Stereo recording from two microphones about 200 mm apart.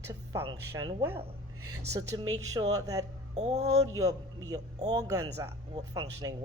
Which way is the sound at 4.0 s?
20° right (ahead or behind).